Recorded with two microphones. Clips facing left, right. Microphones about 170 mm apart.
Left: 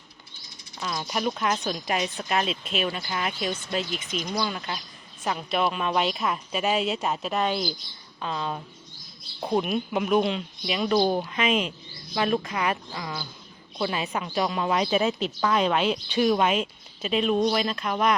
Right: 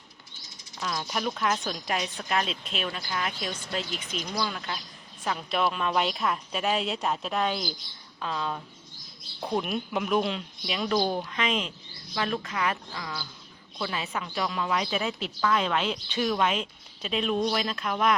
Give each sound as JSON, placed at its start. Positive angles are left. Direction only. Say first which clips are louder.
{"t": 0.8, "sound": "speech", "louder": "left 2 dB", "side_deg": 5}
{"t": 9.6, "sound": "a woman's voice", "louder": "left 4 dB", "side_deg": 0}